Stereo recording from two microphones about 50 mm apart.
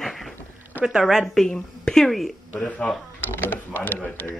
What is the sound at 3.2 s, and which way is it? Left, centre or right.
Speech, left.